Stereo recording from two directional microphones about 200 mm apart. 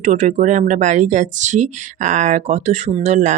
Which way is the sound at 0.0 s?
35° right (ahead or behind).